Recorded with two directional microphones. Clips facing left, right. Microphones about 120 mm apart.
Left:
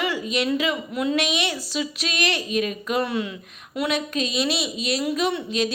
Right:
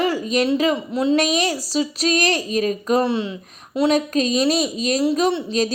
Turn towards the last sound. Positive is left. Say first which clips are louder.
# right 5 dB
turn(degrees=-30)  # may be behind; listen again after turning